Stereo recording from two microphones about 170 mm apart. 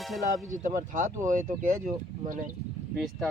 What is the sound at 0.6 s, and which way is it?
Speech, 50° right (ahead or behind).